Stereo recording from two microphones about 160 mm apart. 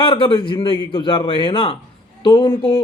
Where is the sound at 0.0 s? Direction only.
30° left (ahead or behind).